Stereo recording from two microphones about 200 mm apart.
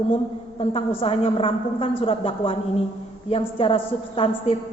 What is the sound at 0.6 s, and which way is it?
A woman's voice, 30° left (ahead or behind).